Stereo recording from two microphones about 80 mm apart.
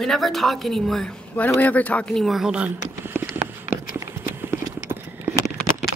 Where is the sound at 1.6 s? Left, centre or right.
Centre.